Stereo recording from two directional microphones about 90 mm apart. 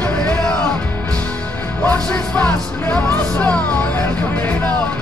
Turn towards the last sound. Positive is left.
turn(degrees=15)  # may be behind; listen again after turning